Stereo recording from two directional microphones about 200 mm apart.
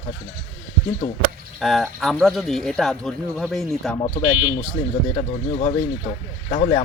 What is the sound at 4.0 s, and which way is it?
Speech, 25° left (ahead or behind).